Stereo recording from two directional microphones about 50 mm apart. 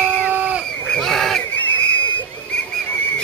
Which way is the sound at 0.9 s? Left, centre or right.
Centre.